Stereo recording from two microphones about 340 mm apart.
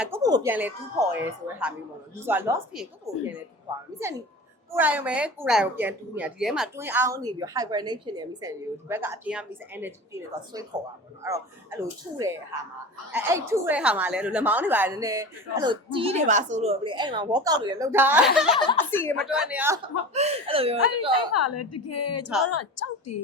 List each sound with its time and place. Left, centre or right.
0.0 s a woman's voice: centre
20.1 s a woman's voice: centre
21.3 s a woman's voice: left